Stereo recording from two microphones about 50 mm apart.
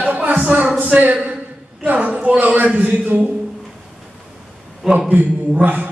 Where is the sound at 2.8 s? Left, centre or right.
Right.